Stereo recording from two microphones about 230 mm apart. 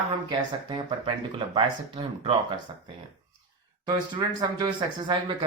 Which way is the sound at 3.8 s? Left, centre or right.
Centre.